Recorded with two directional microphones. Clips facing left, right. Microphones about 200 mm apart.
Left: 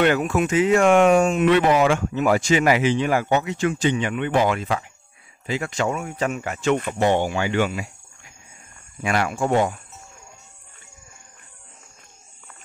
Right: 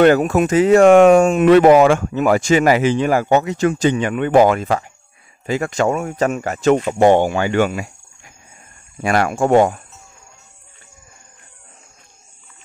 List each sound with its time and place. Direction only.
0.0 s speech: 40° right (ahead or behind)
9.0 s speech: 45° right (ahead or behind)